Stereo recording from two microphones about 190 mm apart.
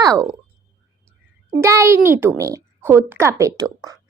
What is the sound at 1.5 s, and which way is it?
Speech, 15° right (ahead or behind).